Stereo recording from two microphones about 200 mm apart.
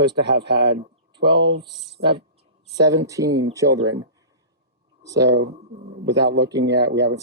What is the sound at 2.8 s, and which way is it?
Speech, 15° right (ahead or behind).